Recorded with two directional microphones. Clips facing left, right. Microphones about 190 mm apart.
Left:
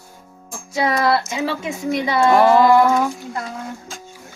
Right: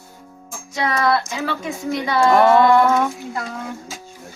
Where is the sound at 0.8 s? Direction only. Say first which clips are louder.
Left 2 dB; 30° left (ahead or behind).